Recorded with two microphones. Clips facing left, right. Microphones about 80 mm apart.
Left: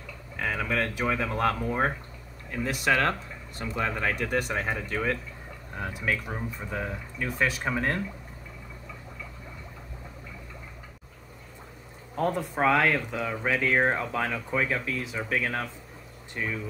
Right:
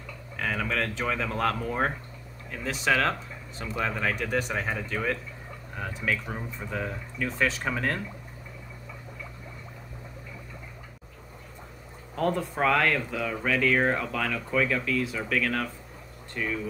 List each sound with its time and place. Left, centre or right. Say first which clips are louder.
0.4 s speech: left 1 dB; centre
12.2 s speech: even; centre